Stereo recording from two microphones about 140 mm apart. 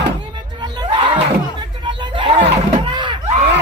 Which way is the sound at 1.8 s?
35° right (ahead or behind).